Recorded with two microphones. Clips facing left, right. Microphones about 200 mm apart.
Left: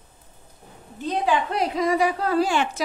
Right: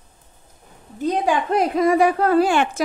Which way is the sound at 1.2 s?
50° right (ahead or behind).